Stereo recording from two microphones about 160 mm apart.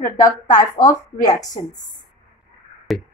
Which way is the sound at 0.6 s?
25° left (ahead or behind).